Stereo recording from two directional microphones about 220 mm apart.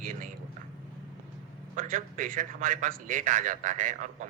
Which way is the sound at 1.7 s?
35° right (ahead or behind).